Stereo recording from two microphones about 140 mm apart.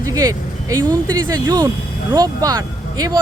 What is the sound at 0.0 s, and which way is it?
Speech, 25° right (ahead or behind).